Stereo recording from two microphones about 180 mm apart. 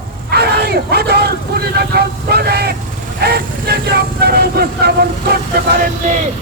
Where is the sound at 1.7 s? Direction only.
60° right (ahead or behind).